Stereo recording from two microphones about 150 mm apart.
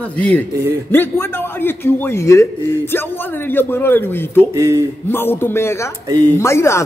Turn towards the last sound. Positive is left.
turn(degrees=20)  # may be behind; listen again after turning